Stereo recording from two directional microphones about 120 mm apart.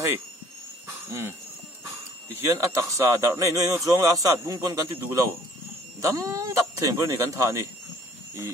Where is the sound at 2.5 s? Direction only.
25° right (ahead or behind).